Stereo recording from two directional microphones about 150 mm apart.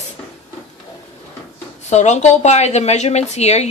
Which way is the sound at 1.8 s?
50° left (ahead or behind).